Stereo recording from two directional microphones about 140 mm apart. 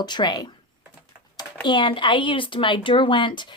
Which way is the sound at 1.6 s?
35° left (ahead or behind).